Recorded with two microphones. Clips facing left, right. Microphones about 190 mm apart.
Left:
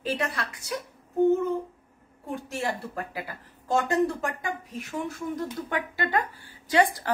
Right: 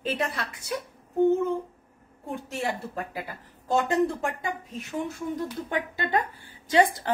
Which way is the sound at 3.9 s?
25° right (ahead or behind).